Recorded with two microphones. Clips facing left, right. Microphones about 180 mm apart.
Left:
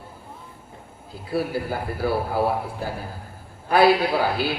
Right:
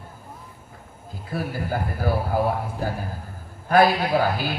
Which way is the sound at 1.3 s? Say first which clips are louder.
Left 2 dB; 45° right (ahead or behind).